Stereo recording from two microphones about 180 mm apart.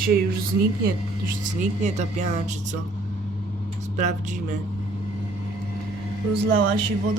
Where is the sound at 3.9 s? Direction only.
40° right (ahead or behind).